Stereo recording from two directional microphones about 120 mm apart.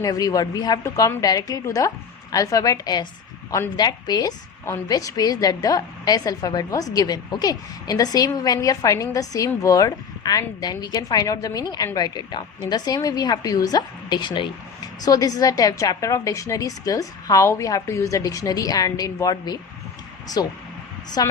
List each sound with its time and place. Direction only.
0.0 s a woman's voice: 30° left (ahead or behind)
15.0 s a woman's voice: 30° left (ahead or behind)